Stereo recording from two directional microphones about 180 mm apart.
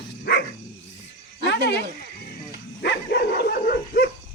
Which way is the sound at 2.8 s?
75° left (ahead or behind).